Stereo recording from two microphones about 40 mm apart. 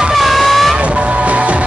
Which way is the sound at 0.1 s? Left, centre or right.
Centre.